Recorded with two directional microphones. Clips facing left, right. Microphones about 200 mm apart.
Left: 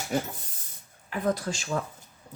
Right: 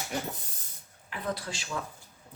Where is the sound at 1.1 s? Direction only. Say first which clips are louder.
Left 7 dB; 45° left (ahead or behind).